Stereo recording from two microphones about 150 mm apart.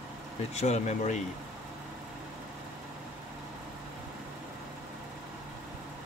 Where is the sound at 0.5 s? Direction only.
50° left (ahead or behind).